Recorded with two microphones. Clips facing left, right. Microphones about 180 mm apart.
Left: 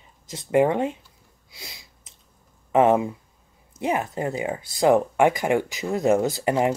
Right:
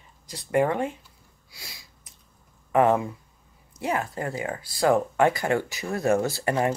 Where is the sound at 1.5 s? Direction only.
20° left (ahead or behind).